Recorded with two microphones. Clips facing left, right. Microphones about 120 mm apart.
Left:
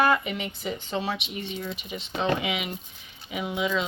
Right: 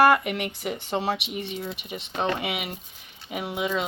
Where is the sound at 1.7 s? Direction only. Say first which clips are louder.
Right 1 dB; 65° right (ahead or behind).